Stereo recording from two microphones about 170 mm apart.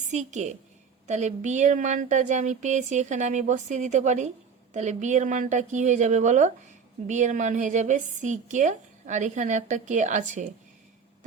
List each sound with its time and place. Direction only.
0.1 s a woman's voice: 45° right (ahead or behind)